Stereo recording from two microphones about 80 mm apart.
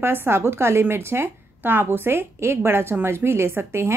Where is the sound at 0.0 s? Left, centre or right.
Right.